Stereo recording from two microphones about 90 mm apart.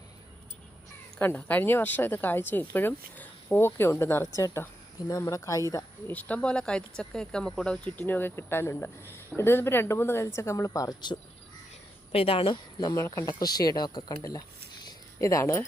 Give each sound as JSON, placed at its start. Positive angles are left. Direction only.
{"t": 1.2, "sound": "speech", "side_deg": 20}
{"t": 6.1, "sound": "speech", "side_deg": 15}
{"t": 10.7, "sound": "speech", "side_deg": 40}
{"t": 12.1, "sound": "a woman's voice", "side_deg": 90}
{"t": 12.8, "sound": "speech", "side_deg": 40}
{"t": 15.2, "sound": "speech", "side_deg": 35}